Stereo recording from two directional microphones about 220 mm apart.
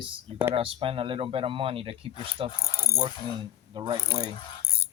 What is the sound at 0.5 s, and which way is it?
Speech, 25° right (ahead or behind).